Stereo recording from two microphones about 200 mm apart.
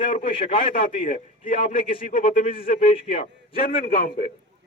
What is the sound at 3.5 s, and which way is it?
Speech, 40° left (ahead or behind).